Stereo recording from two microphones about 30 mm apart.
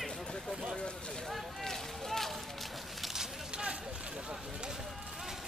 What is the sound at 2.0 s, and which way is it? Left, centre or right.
Run, centre.